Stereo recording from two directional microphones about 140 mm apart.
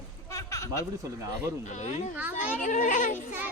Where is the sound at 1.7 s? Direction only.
55° left (ahead or behind).